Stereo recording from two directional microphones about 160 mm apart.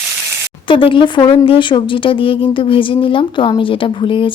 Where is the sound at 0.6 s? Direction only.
30° left (ahead or behind).